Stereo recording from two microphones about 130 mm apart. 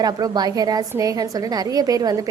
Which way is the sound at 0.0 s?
30° right (ahead or behind).